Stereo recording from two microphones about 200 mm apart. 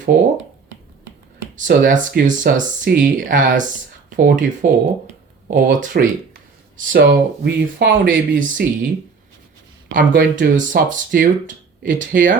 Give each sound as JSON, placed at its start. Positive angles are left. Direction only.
{"t": 1.5, "sound": "speech", "side_deg": -40}
{"t": 6.9, "sound": "speech", "side_deg": -55}
{"t": 9.9, "sound": "speech", "side_deg": -40}